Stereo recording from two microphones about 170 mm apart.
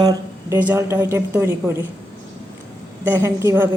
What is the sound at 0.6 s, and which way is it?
Speech, 10° right (ahead or behind).